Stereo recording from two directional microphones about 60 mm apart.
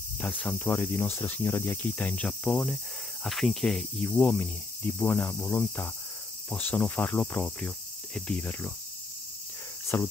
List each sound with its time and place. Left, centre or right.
0.2 s speech: left
0.7 s cricket: left
2.4 s speech: centre
3.3 s speech: centre
4.0 s cricket: left
6.5 s speech: left
9.9 s cricket: left